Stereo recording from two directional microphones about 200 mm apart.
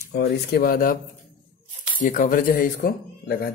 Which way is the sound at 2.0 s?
40° left (ahead or behind).